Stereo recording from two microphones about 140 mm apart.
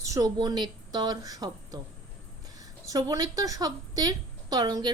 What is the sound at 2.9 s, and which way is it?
A woman's voice, 25° right (ahead or behind).